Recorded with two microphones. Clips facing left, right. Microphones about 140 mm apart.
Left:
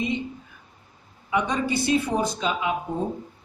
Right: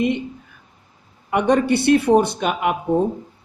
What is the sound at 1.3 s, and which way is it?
Speech, 60° right (ahead or behind).